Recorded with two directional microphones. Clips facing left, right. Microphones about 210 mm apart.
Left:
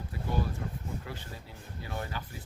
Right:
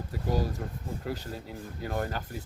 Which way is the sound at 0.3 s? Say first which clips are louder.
Right 3 dB; 40° right (ahead or behind).